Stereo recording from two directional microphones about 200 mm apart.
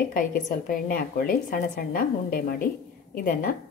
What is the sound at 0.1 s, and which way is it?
A woman's voice, 40° left (ahead or behind).